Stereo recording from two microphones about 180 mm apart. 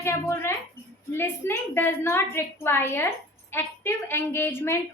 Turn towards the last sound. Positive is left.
turn(degrees=15)  # may be behind; listen again after turning